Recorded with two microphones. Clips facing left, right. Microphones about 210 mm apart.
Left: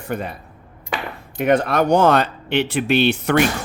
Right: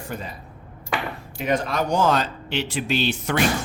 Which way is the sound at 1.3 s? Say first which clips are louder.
Left 7 dB; 60° left (ahead or behind).